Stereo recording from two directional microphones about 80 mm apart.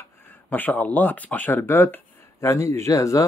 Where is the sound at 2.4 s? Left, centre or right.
Left.